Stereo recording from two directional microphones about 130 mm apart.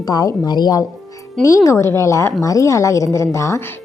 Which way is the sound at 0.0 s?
30° left (ahead or behind).